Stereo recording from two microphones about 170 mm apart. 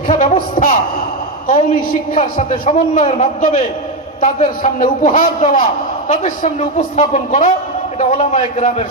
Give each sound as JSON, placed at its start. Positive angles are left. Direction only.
{"t": 0.1, "sound": "a sound", "side_deg": 45}
{"t": 2.1, "sound": "a man's voice", "side_deg": 30}
{"t": 2.7, "sound": "a man's voice", "side_deg": 45}